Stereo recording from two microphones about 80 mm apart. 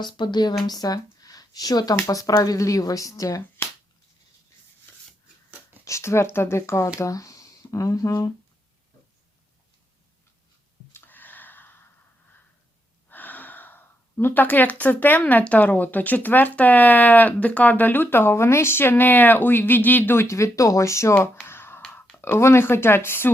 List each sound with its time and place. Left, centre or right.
0.0 s speech: left
0.7 s speech: left
5.8 s speech: left
10.9 s a sound: left
13.1 s speech: left
20.2 s speech: left
21.4 s a sound: left
22.1 s speech: left